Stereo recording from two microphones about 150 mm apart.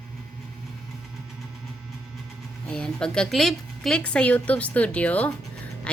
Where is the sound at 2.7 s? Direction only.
5° left (ahead or behind).